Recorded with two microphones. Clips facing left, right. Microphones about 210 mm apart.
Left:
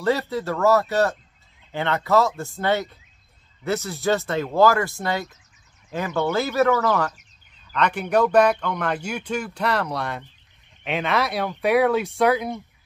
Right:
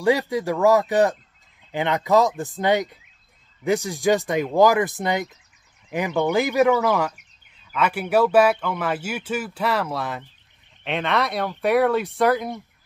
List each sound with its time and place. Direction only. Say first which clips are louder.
0.0 s speech: right 3 dB; 15° right (ahead or behind)